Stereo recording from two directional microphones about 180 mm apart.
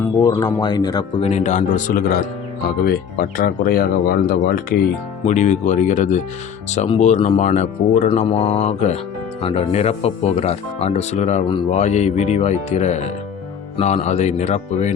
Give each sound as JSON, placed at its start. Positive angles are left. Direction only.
{"t": 0.2, "sound": "speech", "side_deg": 20}
{"t": 1.2, "sound": "a man's voice", "side_deg": 40}
{"t": 2.8, "sound": "speech", "side_deg": 55}
{"t": 5.2, "sound": "speech", "side_deg": 40}